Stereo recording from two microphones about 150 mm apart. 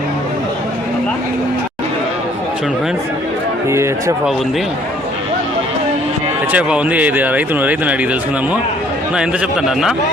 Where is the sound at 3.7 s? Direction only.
20° right (ahead or behind).